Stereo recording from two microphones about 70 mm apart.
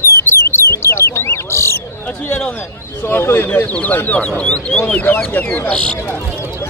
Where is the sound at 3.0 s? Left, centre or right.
Left.